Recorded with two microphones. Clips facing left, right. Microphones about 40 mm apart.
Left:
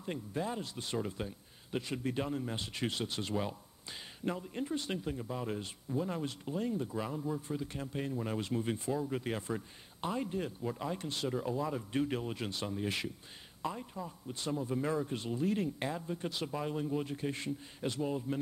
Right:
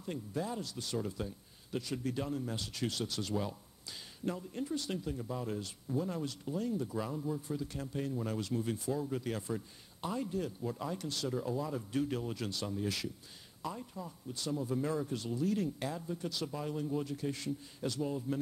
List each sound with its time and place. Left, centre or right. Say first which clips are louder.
0.0 s speech: left 1 dB; left
6.7 s speech: even; left
7.3 s speech: left 1 dB; left
11.3 s speech: left 1 dB; centre